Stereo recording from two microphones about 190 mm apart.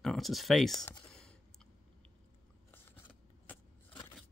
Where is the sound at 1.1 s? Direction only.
5° left (ahead or behind).